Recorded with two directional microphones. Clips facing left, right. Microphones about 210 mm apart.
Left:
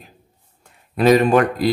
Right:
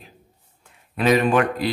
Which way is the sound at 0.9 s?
40° left (ahead or behind).